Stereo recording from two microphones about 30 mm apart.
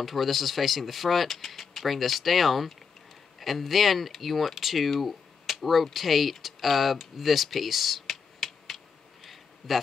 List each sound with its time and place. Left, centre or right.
0.0 s speech: centre
5.0 s a sound: centre
5.9 s speech: centre
6.4 s computer keyboard: centre